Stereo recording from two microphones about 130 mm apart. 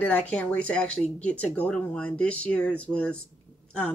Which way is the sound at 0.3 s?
10° left (ahead or behind).